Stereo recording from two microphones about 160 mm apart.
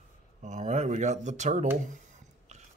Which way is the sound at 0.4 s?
50° right (ahead or behind).